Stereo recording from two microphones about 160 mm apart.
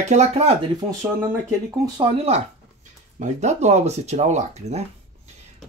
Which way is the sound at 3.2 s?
45° right (ahead or behind).